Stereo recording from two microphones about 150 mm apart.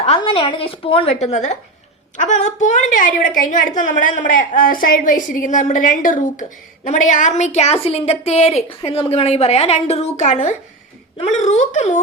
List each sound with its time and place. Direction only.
0.2 s a woman's voice: 35° left (ahead or behind); by 11.9 s 50° left (ahead or behind)